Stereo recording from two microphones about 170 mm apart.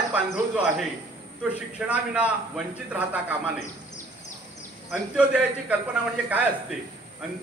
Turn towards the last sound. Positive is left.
turn(degrees=-10)  # may be behind; listen again after turning